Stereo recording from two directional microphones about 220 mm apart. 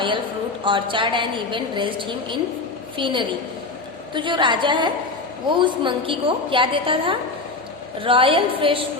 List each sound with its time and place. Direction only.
0.6 s a woman's voice: 20° right (ahead or behind)